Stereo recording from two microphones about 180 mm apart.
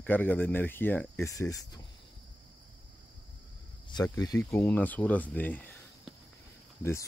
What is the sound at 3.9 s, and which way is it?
Speech, 20° left (ahead or behind).